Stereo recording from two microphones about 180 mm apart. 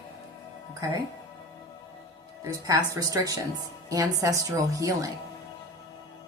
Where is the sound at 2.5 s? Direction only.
20° right (ahead or behind).